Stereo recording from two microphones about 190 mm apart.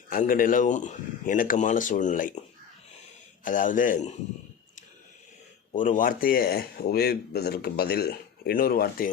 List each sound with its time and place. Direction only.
0.1 s speech: 45° left (ahead or behind)
3.4 s speech: 45° left (ahead or behind)
5.7 s speech: 45° left (ahead or behind)